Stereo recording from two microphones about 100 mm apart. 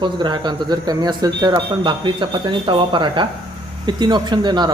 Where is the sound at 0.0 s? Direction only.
50° right (ahead or behind).